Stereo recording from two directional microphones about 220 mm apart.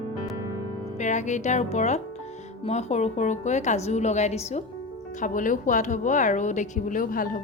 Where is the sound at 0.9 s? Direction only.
35° left (ahead or behind).